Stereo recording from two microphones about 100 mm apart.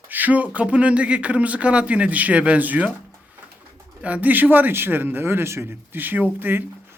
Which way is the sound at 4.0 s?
15° right (ahead or behind).